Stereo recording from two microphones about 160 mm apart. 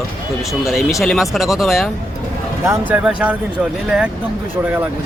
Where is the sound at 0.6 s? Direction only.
Centre (ahead or behind).